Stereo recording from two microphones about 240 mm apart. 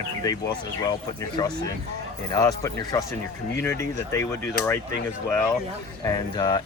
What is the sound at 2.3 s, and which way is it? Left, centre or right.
Speech, centre.